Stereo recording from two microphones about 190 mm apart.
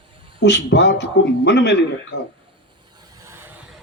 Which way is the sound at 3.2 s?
15° right (ahead or behind).